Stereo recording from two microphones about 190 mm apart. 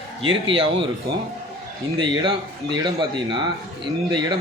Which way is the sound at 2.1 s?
25° right (ahead or behind).